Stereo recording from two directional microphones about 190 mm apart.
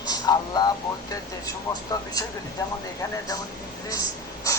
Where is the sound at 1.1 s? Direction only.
20° left (ahead or behind).